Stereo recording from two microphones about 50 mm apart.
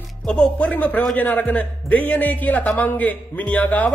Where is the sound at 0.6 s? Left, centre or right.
Left.